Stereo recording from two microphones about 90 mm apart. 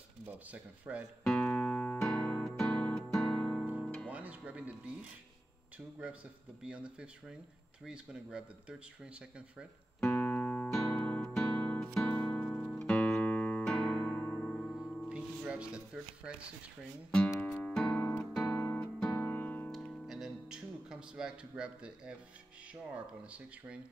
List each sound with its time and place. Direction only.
0.3 s speech: 15° right (ahead or behind)
1.2 s music: 15° left (ahead or behind)
4.1 s speech: 15° right (ahead or behind)
6.6 s speech: 10° right (ahead or behind)
10.1 s music: 20° left (ahead or behind)
11.0 s guitar: 15° left (ahead or behind)
11.2 s music: 5° left (ahead or behind)
15.0 s music: 10° right (ahead or behind)
17.4 s music: 20° left (ahead or behind)
17.7 s guitar: 15° left (ahead or behind)
18.9 s music: 15° left (ahead or behind)
19.7 s music: 10° left (ahead or behind)
20.1 s music: 5° right (ahead or behind)
22.8 s speech: 15° right (ahead or behind)